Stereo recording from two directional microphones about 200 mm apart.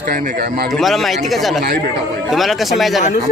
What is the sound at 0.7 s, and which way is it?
Speech, centre (ahead or behind).